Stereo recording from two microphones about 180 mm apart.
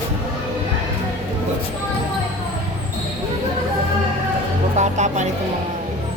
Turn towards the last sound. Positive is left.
turn(degrees=-40)  # may be behind; listen again after turning